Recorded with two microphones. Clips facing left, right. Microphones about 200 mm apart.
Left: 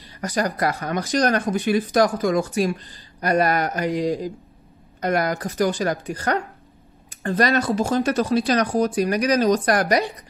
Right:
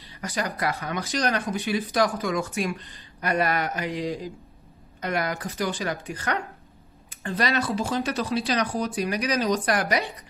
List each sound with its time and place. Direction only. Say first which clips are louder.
0.2 s speech: left 6 dB; 40° left (ahead or behind)